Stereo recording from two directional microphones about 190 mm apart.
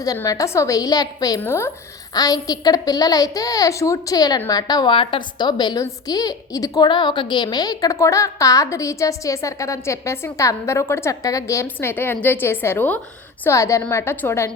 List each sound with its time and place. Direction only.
0.0 s a woman's voice: 20° left (ahead or behind)